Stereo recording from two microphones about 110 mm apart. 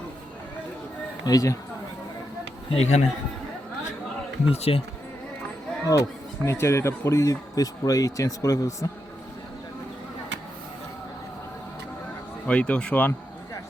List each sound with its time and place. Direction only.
1.2 s speech: 35° left (ahead or behind)
2.6 s speech: 75° left (ahead or behind)
4.4 s speech: 60° left (ahead or behind)
5.9 s speech: 30° left (ahead or behind)
12.5 s speech: 10° left (ahead or behind)